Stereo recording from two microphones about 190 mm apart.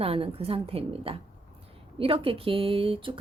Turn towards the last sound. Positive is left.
turn(degrees=-25)  # may be behind; listen again after turning